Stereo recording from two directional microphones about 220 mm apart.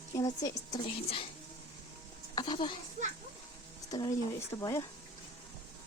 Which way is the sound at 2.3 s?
20° left (ahead or behind).